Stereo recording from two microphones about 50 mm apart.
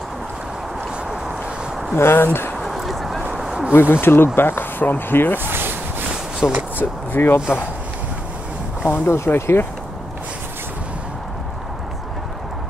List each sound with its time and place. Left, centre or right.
2.0 s speech: left
2.6 s a sound: centre
3.2 s quack: centre
3.7 s speech: left
5.4 s rub: right
6.4 s speech: left
6.8 s speech: left
8.8 s speech: left